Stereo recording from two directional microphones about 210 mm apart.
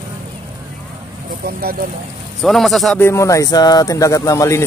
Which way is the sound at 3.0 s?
15° left (ahead or behind).